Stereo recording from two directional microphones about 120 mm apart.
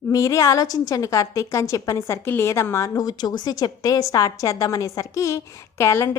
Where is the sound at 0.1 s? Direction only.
25° left (ahead or behind).